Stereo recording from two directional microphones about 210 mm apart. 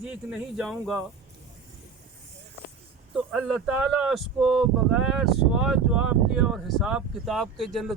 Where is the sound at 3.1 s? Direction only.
Centre (ahead or behind).